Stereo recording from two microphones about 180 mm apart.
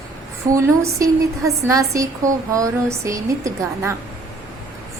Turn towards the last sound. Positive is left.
turn(degrees=-15)  # may be behind; listen again after turning